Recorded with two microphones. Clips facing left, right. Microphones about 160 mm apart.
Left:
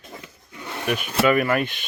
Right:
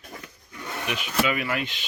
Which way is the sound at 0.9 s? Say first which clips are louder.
Left 6 dB; 50° left (ahead or behind).